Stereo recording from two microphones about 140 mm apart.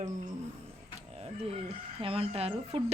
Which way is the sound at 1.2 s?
45° right (ahead or behind).